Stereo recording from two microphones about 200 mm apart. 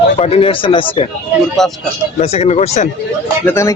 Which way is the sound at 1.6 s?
Centre (ahead or behind).